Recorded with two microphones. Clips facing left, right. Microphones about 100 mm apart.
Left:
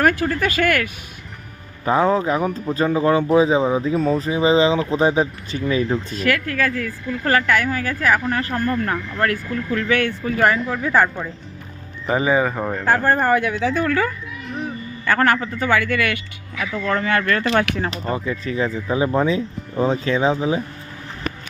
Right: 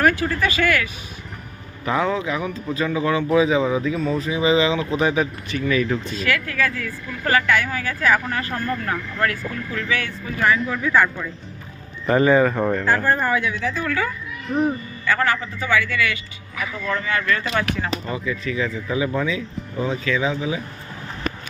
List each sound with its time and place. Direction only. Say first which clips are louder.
0.0 s speech: left 1 dB; 45° left (ahead or behind)
1.8 s speech: left 4 dB; 35° left (ahead or behind)
6.1 s speech: left 4 dB; 45° left (ahead or behind); by 10.5 s 60° left (ahead or behind)
10.5 s speech: even; 35° left (ahead or behind)
12.0 s speech: right 2 dB; 10° left (ahead or behind)
12.8 s speech: left 7 dB; 50° left (ahead or behind)
13.8 s a man's voice: left 4 dB; 45° left (ahead or behind)
17.7 s speech: left 2 dB; 40° left (ahead or behind)